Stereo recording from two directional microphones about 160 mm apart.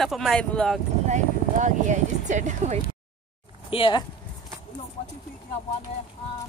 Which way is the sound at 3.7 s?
35° left (ahead or behind).